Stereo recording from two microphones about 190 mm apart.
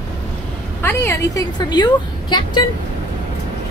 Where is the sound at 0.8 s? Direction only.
15° left (ahead or behind).